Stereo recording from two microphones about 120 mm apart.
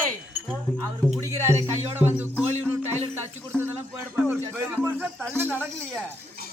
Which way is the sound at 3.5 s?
5° left (ahead or behind).